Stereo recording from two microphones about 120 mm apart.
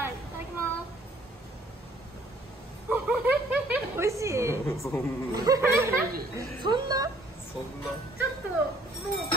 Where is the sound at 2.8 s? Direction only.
10° right (ahead or behind).